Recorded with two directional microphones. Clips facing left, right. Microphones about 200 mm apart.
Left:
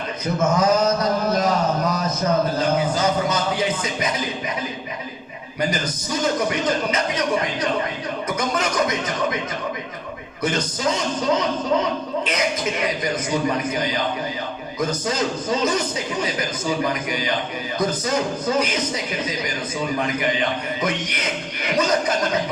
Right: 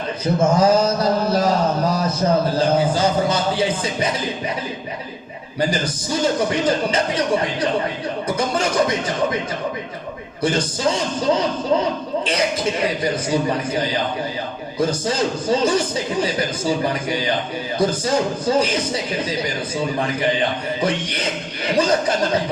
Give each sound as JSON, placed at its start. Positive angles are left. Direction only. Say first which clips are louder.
{"t": 0.3, "sound": "a sound", "louder": "right 3 dB", "side_deg": -30}
{"t": 5.5, "sound": "a man's voice", "louder": "right 3 dB", "side_deg": -30}
{"t": 10.4, "sound": "a man's voice", "louder": "right 3 dB", "side_deg": -30}
{"t": 13.5, "sound": "a man's voice", "louder": "right 2 dB", "side_deg": -30}